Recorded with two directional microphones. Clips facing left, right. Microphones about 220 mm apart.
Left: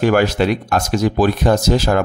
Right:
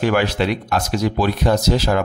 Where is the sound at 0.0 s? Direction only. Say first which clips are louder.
Left 4 dB; 45° left (ahead or behind).